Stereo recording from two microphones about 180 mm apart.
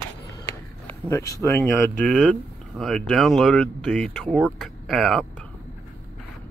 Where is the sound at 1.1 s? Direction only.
15° left (ahead or behind).